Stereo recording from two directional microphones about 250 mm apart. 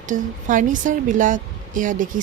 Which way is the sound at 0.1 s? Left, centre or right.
Right.